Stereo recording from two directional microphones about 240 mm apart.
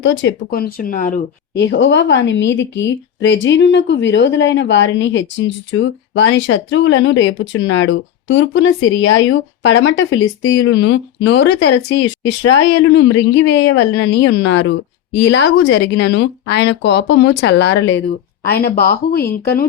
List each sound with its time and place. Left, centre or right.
0.0 s speech: left
18.4 s speech: left